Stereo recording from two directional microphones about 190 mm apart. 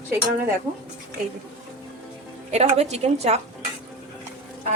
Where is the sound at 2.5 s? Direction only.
35° right (ahead or behind).